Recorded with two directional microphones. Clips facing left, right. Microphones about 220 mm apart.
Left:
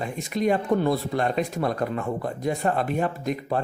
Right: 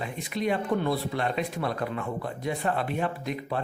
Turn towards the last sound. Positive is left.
turn(degrees=45)  # may be behind; listen again after turning